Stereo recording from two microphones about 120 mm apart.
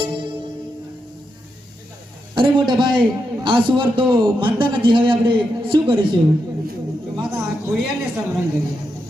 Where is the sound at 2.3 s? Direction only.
40° right (ahead or behind).